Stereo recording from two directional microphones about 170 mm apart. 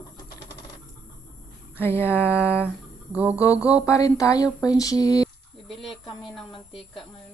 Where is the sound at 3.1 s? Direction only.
10° right (ahead or behind).